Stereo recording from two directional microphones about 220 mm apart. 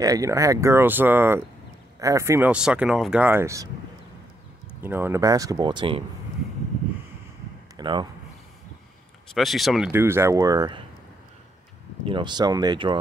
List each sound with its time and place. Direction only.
0.0 s speech: 15° right (ahead or behind)
4.8 s speech: 10° right (ahead or behind)
7.7 s speech: 20° right (ahead or behind)
9.3 s speech: centre (ahead or behind); by 10.8 s 15° right (ahead or behind)
12.0 s speech: 20° right (ahead or behind)